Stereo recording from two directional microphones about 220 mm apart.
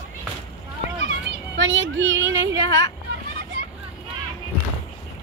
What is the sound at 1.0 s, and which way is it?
Children playing, 55° right (ahead or behind).